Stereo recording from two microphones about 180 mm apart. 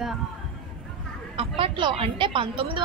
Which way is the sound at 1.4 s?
30° right (ahead or behind).